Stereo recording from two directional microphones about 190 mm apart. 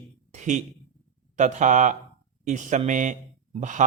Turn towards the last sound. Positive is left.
turn(degrees=-40)  # may be behind; listen again after turning